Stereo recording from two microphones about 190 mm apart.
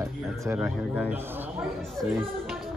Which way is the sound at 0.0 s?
15° right (ahead or behind).